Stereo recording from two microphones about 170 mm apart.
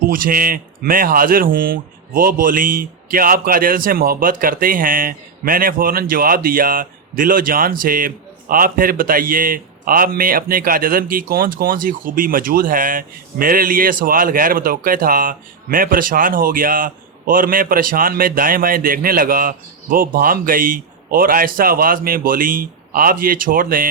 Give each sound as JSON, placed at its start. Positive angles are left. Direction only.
{"t": 0.1, "sound": "speech", "side_deg": -55}